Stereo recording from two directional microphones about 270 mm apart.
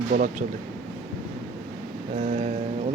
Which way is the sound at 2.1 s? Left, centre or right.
Right.